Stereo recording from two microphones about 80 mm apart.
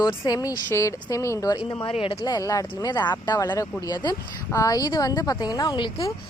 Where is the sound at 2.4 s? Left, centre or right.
Left.